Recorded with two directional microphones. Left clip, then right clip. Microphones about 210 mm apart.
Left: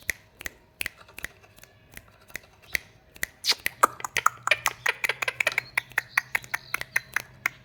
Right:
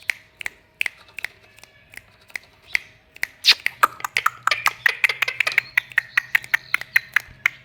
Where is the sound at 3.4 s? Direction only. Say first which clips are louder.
Right 7 dB; 10° left (ahead or behind).